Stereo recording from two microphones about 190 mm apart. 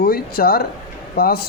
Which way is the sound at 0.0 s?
50° left (ahead or behind).